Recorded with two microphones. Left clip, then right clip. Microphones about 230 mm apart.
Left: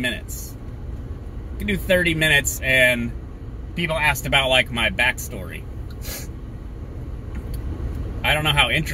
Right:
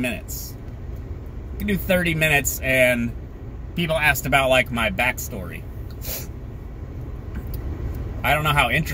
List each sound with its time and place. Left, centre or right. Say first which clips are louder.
1.7 s speech: left 2 dB; centre
8.2 s speech: left 1 dB; centre